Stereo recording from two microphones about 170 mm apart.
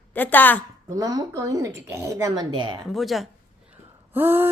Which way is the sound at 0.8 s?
20° right (ahead or behind).